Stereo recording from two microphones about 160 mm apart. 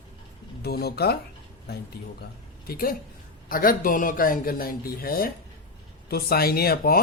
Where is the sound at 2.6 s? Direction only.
70° left (ahead or behind).